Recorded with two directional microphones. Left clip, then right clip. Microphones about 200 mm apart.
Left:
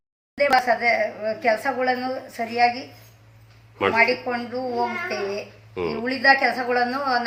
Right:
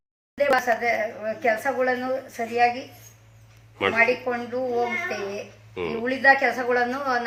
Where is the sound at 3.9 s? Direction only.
5° right (ahead or behind).